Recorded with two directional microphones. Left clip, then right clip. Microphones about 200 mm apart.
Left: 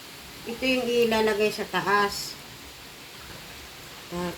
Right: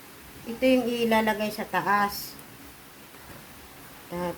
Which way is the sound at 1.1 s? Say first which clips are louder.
Left 1 dB; 35° right (ahead or behind).